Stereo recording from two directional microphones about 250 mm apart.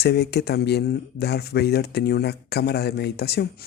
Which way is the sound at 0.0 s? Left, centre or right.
Left.